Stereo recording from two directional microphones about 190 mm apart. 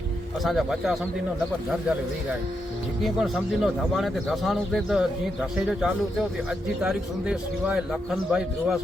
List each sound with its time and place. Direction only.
0.4 s speech: centre (ahead or behind)
3.0 s speech: centre (ahead or behind)